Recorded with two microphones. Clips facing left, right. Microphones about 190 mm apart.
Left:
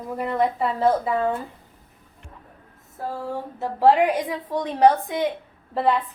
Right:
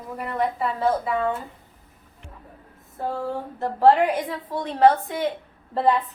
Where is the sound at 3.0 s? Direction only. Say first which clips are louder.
Right 2 dB; 5° left (ahead or behind).